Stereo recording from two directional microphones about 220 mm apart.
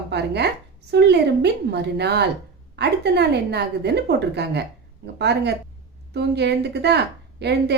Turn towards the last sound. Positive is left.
turn(degrees=-50)  # may be behind; listen again after turning